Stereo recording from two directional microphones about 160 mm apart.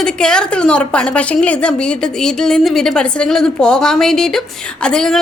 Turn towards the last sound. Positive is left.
turn(degrees=5)  # may be behind; listen again after turning